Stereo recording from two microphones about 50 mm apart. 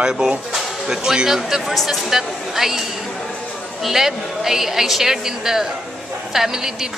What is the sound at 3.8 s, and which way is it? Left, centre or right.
Speech, centre.